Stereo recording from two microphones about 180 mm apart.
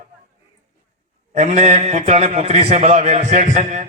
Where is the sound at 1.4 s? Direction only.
40° right (ahead or behind).